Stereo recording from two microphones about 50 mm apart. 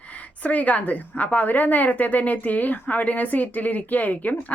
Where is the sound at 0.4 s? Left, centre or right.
Left.